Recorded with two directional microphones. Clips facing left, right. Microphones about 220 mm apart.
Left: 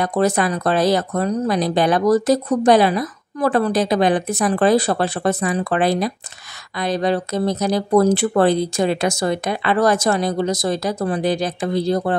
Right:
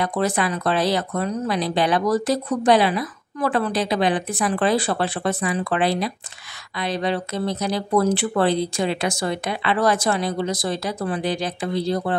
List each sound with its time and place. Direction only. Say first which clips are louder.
0.0 s speech: left 4 dB; 40° left (ahead or behind)